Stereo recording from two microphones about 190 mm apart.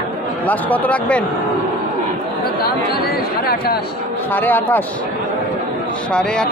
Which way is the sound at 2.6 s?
55° left (ahead or behind).